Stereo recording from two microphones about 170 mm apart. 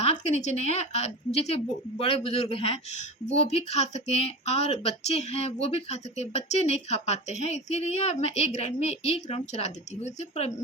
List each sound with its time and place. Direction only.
0.3 s speech: 40° left (ahead or behind)